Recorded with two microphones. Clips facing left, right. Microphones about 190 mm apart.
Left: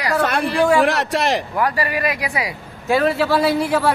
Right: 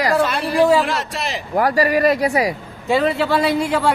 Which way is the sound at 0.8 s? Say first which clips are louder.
Left 6 dB; 75° left (ahead or behind).